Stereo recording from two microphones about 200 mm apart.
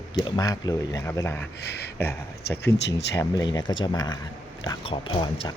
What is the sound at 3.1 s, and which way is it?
Speech, 20° left (ahead or behind).